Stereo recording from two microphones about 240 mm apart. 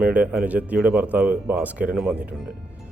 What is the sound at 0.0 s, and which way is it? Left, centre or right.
Speech, centre.